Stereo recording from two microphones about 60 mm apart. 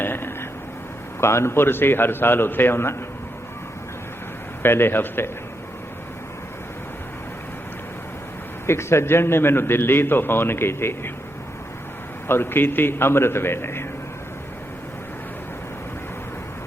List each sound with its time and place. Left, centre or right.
0.0 s a sound: left
1.2 s a man's voice: left
4.6 s a man's voice: left
8.6 s a man's voice: left
12.3 s a man's voice: left